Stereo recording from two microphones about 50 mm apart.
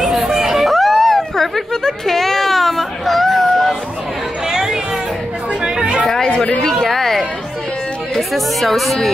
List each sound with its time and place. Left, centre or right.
0.0 s chatter: centre
4.5 s chatter: centre
6.0 s chatter: centre
6.8 s a sound: centre
8.1 s speech: centre